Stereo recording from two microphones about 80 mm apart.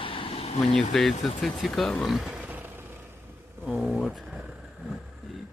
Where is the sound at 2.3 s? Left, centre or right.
Centre.